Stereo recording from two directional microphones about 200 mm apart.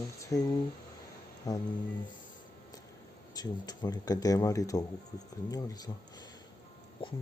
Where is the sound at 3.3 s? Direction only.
20° left (ahead or behind).